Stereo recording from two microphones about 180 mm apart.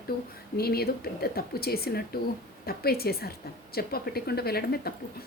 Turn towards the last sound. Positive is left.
turn(degrees=60)  # may be behind; listen again after turning